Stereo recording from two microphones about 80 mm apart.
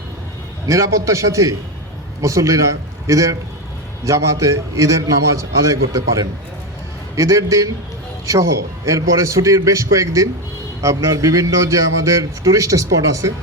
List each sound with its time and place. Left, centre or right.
0.7 s a man's voice: right